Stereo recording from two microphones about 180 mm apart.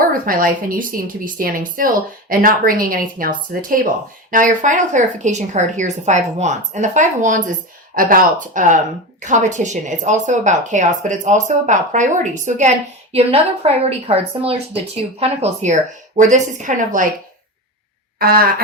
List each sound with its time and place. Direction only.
0.0 s a woman's voice: 50° right (ahead or behind)
18.2 s speech: 55° right (ahead or behind)